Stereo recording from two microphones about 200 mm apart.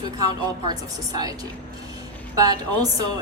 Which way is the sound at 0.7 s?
20° right (ahead or behind).